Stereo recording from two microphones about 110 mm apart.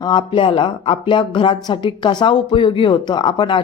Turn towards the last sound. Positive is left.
turn(degrees=50)  # may be behind; listen again after turning